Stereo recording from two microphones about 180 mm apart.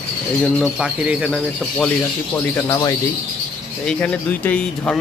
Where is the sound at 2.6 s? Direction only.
20° left (ahead or behind).